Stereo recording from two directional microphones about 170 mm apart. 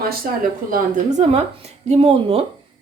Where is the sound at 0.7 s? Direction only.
45° right (ahead or behind).